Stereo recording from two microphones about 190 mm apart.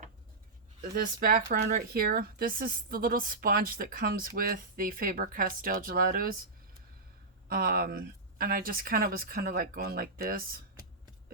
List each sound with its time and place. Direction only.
0.8 s speech: 50° right (ahead or behind)
7.5 s speech: 50° right (ahead or behind)